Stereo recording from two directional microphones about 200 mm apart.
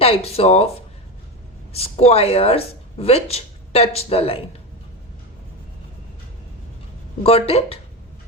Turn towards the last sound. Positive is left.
turn(degrees=30)  # may be behind; listen again after turning